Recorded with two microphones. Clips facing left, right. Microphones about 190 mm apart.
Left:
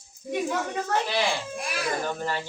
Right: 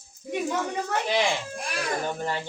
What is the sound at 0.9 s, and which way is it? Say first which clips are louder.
Speech: right 1 dB; 20° right (ahead or behind).